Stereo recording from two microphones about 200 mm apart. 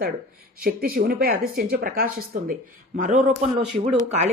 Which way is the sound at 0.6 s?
45° right (ahead or behind).